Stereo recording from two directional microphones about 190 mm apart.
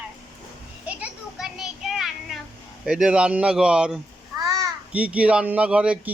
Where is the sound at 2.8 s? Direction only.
5° right (ahead or behind).